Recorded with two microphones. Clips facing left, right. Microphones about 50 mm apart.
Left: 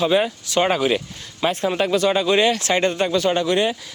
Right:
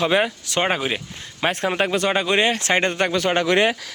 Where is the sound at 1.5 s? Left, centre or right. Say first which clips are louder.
Left 1 dB; right.